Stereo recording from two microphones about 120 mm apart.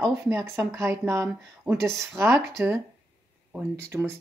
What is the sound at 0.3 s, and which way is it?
Speech, 20° right (ahead or behind).